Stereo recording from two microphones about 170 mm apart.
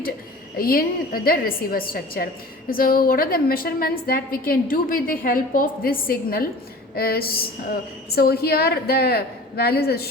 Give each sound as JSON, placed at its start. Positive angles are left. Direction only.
{"t": 0.5, "sound": "a woman's voice", "side_deg": 60}